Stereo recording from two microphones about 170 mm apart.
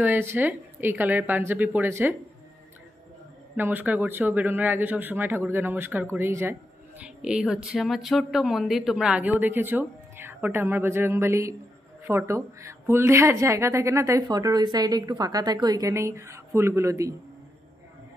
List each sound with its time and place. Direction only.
0.0 s a woman's voice: 10° right (ahead or behind)
3.5 s a woman's voice: 10° right (ahead or behind)